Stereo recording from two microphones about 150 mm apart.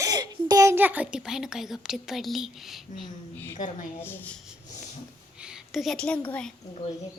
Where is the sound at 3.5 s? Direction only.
60° left (ahead or behind).